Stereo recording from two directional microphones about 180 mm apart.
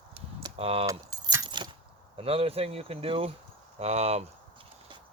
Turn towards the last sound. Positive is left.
turn(degrees=-35)  # may be behind; listen again after turning